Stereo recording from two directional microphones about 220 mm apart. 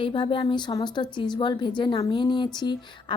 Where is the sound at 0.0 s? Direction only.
20° left (ahead or behind).